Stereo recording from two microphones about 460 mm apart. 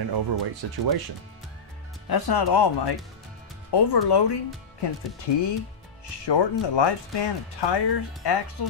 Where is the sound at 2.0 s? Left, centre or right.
Left.